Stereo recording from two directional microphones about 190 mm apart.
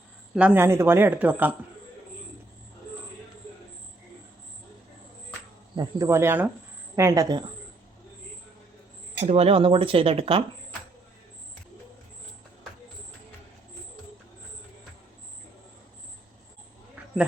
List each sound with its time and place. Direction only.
0.3 s speech: 10° right (ahead or behind)
5.7 s speech: 20° right (ahead or behind)
9.2 s speech: 35° right (ahead or behind)